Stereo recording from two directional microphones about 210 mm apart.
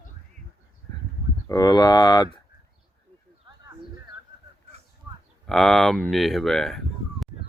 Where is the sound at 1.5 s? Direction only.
20° left (ahead or behind).